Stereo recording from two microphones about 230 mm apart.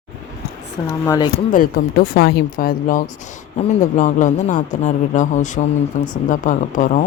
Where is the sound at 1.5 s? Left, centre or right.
Left.